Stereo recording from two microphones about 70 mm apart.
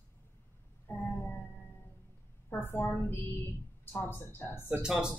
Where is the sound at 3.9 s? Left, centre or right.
Left.